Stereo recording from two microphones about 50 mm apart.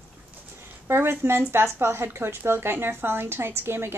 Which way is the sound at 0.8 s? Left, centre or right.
Right.